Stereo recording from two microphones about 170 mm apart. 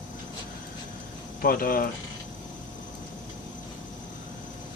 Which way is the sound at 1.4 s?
60° left (ahead or behind).